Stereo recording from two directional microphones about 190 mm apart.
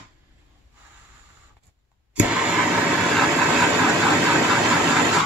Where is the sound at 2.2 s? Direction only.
5° right (ahead or behind).